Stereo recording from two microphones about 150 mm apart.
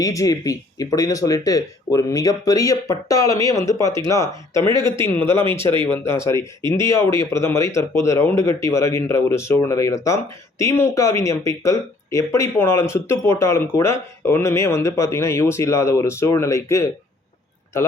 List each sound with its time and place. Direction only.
0.0 s speech: 20° left (ahead or behind)
5.5 s speech: 35° right (ahead or behind)
5.9 s speech: 15° left (ahead or behind)